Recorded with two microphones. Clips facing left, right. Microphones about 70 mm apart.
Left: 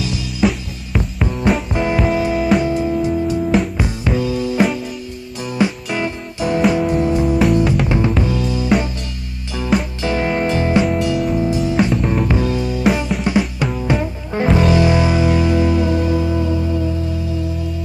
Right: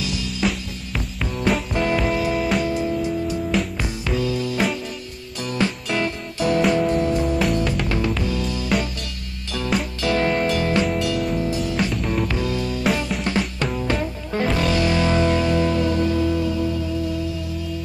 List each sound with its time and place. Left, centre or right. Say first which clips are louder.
0.4 s music: left 7 dB; centre
0.9 s music: left 7 dB; centre
2.3 s music: left 6 dB; centre
2.6 s music: left 5 dB; centre
5.6 s music: left 4 dB; centre
9.7 s music: left 6 dB; centre
10.0 s music: right 2 dB; centre
10.8 s music: left 4 dB; centre
11.4 s music: left 6 dB; centre
13.4 s music: left 4 dB; centre